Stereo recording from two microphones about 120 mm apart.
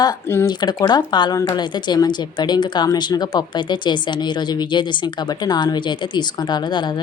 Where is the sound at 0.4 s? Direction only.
35° left (ahead or behind).